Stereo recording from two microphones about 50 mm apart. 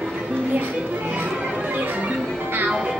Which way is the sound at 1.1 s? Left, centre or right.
Right.